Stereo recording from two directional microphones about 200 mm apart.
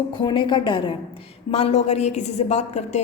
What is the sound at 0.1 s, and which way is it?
A woman's voice, 20° left (ahead or behind).